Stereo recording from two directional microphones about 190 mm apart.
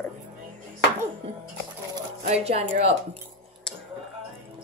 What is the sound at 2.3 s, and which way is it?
Speech, 35° right (ahead or behind).